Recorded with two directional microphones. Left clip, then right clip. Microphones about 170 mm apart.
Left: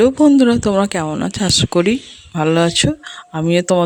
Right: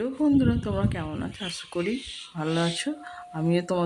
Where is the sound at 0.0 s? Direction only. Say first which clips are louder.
Left 13 dB; 55° left (ahead or behind).